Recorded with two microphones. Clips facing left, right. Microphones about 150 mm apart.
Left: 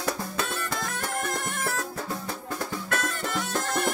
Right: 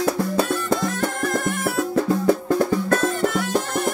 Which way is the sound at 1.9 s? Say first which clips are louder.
Right 15 dB; 90° right.